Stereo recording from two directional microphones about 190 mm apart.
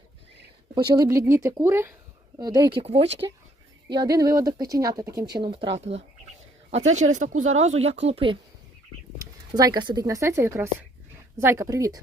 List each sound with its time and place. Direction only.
0.8 s a woman's voice: 20° right (ahead or behind)
3.9 s speech: 20° right (ahead or behind)
9.6 s a woman's voice: 20° right (ahead or behind)